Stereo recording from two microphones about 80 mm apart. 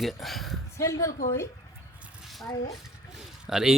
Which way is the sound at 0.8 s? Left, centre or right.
Left.